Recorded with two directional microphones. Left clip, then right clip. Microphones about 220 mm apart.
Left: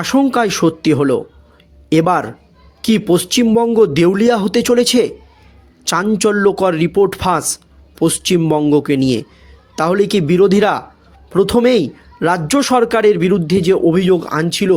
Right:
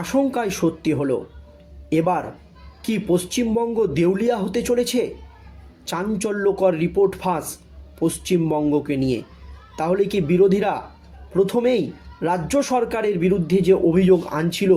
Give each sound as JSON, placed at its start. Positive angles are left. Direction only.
{"t": 0.0, "sound": "speech", "side_deg": 45}